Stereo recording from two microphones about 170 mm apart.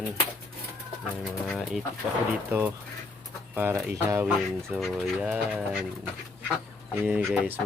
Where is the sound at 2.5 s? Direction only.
15° right (ahead or behind).